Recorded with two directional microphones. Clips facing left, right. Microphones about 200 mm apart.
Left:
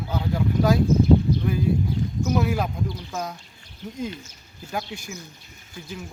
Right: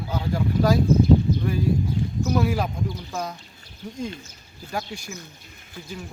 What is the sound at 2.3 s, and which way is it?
A man's voice, centre (ahead or behind).